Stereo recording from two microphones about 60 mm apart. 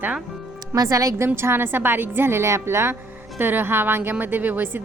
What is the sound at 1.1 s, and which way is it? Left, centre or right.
A woman's voice, right.